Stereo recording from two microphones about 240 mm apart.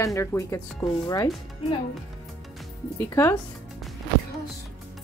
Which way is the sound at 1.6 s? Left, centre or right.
Left.